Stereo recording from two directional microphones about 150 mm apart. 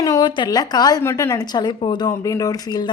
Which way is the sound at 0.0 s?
25° left (ahead or behind).